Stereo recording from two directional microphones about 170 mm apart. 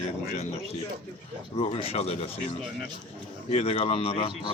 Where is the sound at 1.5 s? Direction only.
35° left (ahead or behind).